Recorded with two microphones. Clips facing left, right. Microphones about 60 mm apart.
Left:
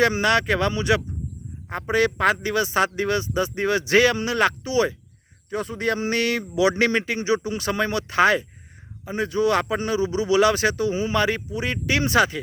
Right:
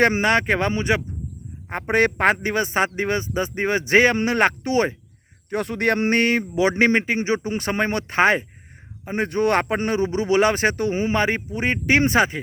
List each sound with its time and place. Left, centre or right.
0.0 s a man's voice: right
5.5 s speech: right
6.1 s a man's voice: right